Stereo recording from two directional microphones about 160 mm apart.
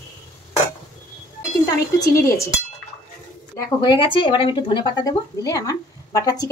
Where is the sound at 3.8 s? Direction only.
30° left (ahead or behind).